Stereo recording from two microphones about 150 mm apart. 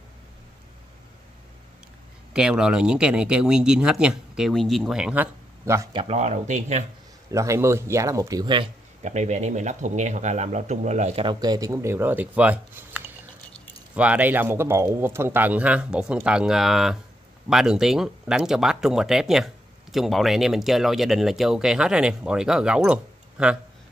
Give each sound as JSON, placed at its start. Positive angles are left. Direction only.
{"t": 2.3, "sound": "speech", "side_deg": -5}
{"t": 5.9, "sound": "speech", "side_deg": -45}
{"t": 7.2, "sound": "speech", "side_deg": -20}
{"t": 9.0, "sound": "speech", "side_deg": -50}
{"t": 11.2, "sound": "speech", "side_deg": -25}